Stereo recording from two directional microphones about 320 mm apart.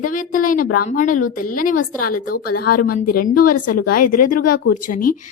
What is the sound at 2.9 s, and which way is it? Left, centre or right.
Speech, left.